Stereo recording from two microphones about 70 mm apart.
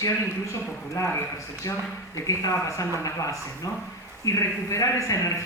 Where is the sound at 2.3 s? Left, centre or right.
Left.